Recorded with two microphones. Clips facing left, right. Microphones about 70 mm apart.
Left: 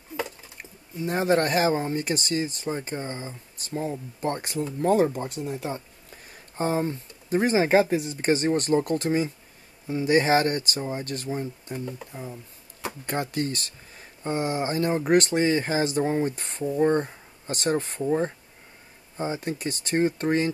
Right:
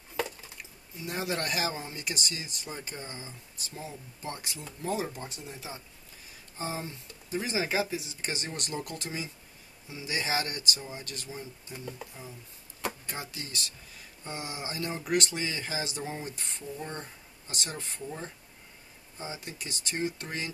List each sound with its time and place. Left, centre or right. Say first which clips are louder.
0.6 s speech: left 10 dB; left